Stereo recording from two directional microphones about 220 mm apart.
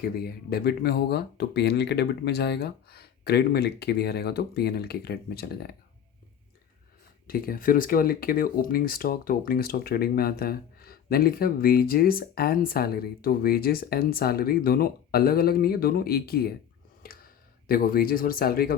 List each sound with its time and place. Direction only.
0.2 s speech: 45° left (ahead or behind)
7.3 s speech: 40° left (ahead or behind)
17.7 s speech: 40° left (ahead or behind)